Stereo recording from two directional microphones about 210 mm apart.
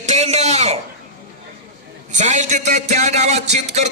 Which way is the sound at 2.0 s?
35° right (ahead or behind).